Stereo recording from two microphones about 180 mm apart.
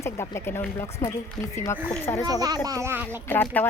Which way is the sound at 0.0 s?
15° left (ahead or behind).